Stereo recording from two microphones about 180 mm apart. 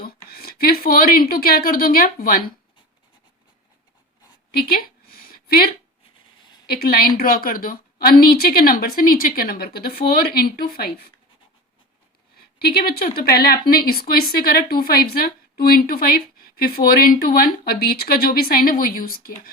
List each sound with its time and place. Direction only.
0.0 s speech: 60° left (ahead or behind)
4.5 s a sound: 55° left (ahead or behind)
6.7 s speech: 55° left (ahead or behind)
12.4 s speech: 60° left (ahead or behind)